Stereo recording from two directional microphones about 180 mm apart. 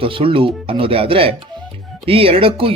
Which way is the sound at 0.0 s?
30° right (ahead or behind).